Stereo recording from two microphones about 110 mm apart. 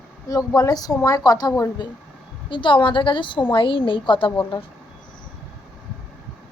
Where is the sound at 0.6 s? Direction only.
35° left (ahead or behind).